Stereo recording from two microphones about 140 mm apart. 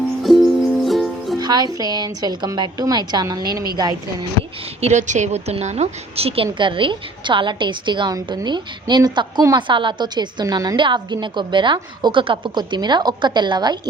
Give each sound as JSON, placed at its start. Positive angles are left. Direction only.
{"t": 0.2, "sound": "music", "side_deg": 0}
{"t": 1.4, "sound": "a woman's voice", "side_deg": -30}
{"t": 4.8, "sound": "a woman's voice", "side_deg": -55}